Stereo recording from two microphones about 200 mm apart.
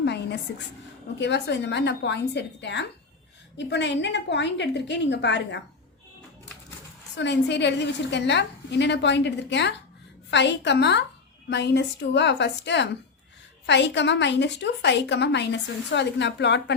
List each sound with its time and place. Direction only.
0.0 s a sound: 60° left (ahead or behind)
1.2 s a woman's voice: 60° left (ahead or behind)
7.2 s a woman's voice: 60° left (ahead or behind)